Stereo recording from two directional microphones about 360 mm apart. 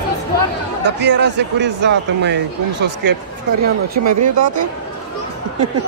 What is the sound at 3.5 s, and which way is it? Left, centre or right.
Speech, right.